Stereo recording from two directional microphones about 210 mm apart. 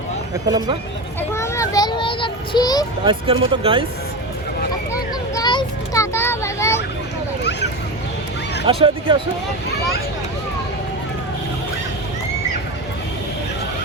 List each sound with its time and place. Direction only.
0.4 s speech: 20° right (ahead or behind)
1.3 s child singing: 15° left (ahead or behind)
3.0 s speech: 25° right (ahead or behind)
5.3 s children playing: 20° left (ahead or behind)
8.6 s speech: 25° right (ahead or behind)